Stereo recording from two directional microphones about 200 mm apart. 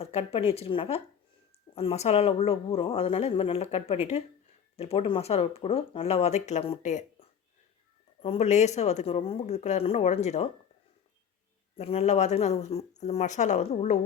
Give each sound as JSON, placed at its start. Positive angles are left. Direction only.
{"t": 0.0, "sound": "speech", "side_deg": 30}
{"t": 8.2, "sound": "speech", "side_deg": 30}
{"t": 11.8, "sound": "speech", "side_deg": 30}